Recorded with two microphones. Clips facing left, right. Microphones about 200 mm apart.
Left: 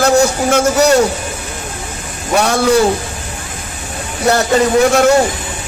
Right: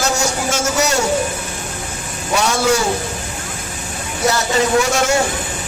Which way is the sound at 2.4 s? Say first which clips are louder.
Left 5 dB; 55° left (ahead or behind).